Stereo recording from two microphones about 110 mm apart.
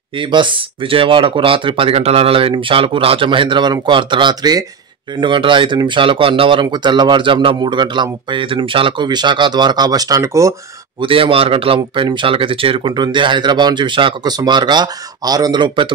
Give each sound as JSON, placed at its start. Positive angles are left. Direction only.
{"t": 0.2, "sound": "speech", "side_deg": -50}
{"t": 11.0, "sound": "speech", "side_deg": -55}